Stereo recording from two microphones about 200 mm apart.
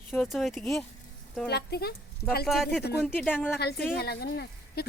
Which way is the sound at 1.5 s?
55° left (ahead or behind).